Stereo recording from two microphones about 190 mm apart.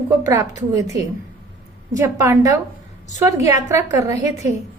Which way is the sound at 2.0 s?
15° right (ahead or behind).